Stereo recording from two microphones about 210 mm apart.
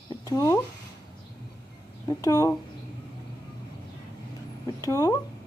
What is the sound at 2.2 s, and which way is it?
Speech, 15° left (ahead or behind).